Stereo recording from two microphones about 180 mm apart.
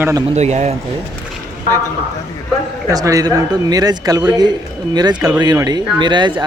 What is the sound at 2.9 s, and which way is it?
Speech, 20° right (ahead or behind).